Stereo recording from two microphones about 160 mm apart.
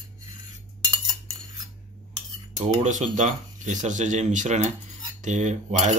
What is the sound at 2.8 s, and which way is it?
Speech, 50° right (ahead or behind).